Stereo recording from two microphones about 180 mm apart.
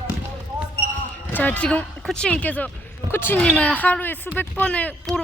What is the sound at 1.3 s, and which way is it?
Speech, 10° left (ahead or behind).